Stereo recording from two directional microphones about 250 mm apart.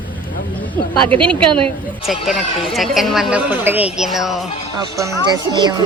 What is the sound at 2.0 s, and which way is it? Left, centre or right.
Speech, centre.